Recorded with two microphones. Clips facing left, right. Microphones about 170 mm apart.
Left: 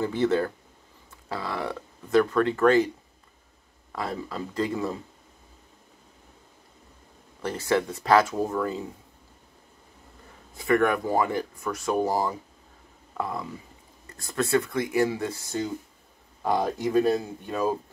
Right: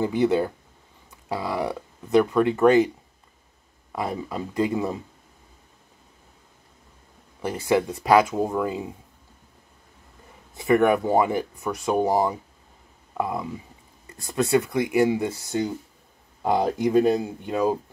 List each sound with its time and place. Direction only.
0.0 s speech: 15° right (ahead or behind)
3.9 s speech: 20° right (ahead or behind)
7.4 s speech: 15° right (ahead or behind)
10.6 s speech: 20° right (ahead or behind)